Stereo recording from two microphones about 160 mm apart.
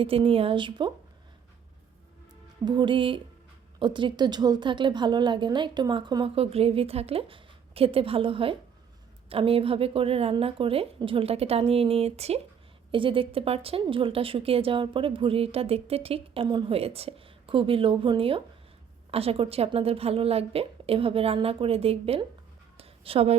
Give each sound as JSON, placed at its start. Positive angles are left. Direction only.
{"t": 0.0, "sound": "a woman's voice", "side_deg": -35}
{"t": 2.6, "sound": "a woman's voice", "side_deg": -30}
{"t": 22.8, "sound": "a sound", "side_deg": -35}